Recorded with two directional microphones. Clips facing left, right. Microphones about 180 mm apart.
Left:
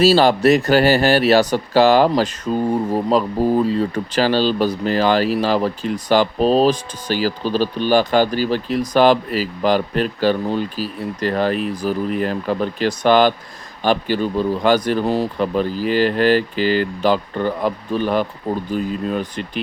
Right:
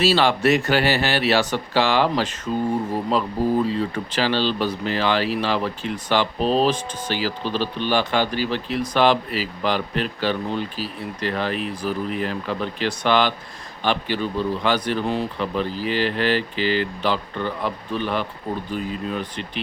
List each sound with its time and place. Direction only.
0.0 s speech: 40° left (ahead or behind)